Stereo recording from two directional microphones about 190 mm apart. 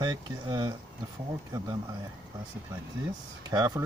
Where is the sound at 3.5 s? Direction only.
20° right (ahead or behind).